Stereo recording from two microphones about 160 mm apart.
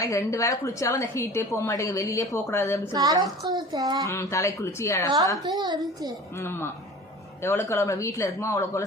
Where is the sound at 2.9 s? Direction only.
25° right (ahead or behind).